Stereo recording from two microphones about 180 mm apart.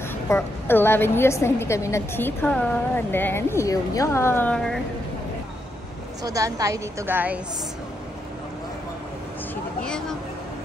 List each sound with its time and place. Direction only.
0.3 s a woman's voice: 15° left (ahead or behind)
6.2 s a woman's voice: 20° right (ahead or behind)
9.8 s a sound: 5° left (ahead or behind)